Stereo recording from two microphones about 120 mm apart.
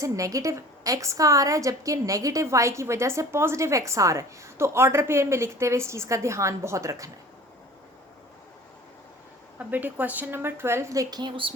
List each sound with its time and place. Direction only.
0.0 s a woman's voice: 25° right (ahead or behind)
9.6 s a woman's voice: 15° right (ahead or behind); by 11.5 s 40° right (ahead or behind)